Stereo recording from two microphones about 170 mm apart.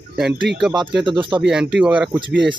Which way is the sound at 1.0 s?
30° right (ahead or behind).